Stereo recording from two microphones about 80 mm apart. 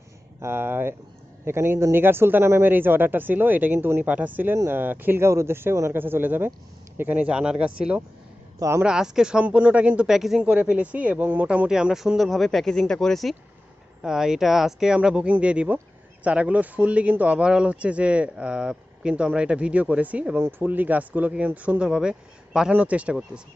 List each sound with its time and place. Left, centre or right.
0.4 s speech: right
4.5 s speech: right
4.8 s speech: right
8.5 s speech: right
8.8 s speech: centre
10.1 s speech: centre
10.4 s speech: centre